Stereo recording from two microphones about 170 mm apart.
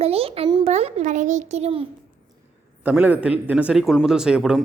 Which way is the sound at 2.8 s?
10° right (ahead or behind).